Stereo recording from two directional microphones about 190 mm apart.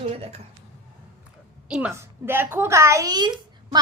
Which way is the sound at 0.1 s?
35° right (ahead or behind).